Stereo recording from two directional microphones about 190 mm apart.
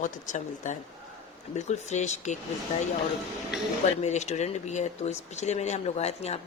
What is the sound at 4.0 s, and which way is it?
Speech, 35° left (ahead or behind).